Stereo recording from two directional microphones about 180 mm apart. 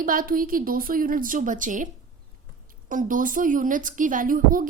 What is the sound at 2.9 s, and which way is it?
A woman's voice, 45° right (ahead or behind).